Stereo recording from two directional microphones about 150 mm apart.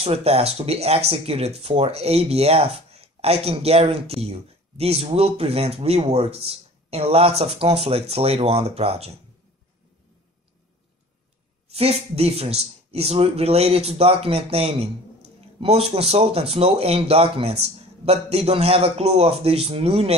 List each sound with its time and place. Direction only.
0.0 s speech: 40° right (ahead or behind)
11.7 s speech: 40° right (ahead or behind)